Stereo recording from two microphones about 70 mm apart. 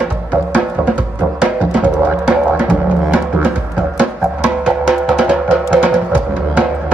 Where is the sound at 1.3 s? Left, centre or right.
Centre.